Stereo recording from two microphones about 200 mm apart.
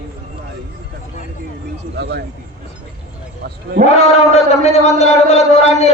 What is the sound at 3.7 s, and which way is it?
Speech, 55° right (ahead or behind).